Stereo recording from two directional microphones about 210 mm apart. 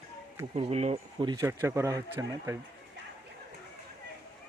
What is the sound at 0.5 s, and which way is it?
Speech, 30° right (ahead or behind).